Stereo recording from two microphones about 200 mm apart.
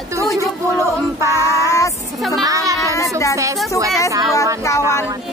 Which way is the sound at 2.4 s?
15° right (ahead or behind).